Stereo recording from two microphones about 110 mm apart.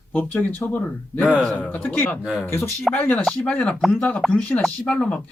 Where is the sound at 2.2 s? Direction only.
5° right (ahead or behind).